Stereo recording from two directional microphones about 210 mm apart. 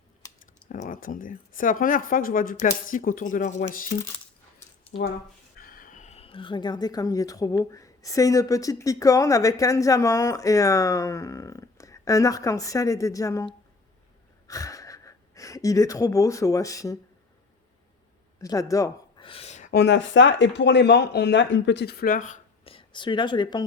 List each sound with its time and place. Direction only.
0.2 s typing: 15° left (ahead or behind)
0.7 s speech: 40° left (ahead or behind)
5.5 s speech: 45° left (ahead or behind); by 17.0 s 15° left (ahead or behind)
18.3 s a sound: 15° left (ahead or behind); by 19.7 s 35° left (ahead or behind)
19.7 s speech: 55° left (ahead or behind); by 23.6 s 20° left (ahead or behind)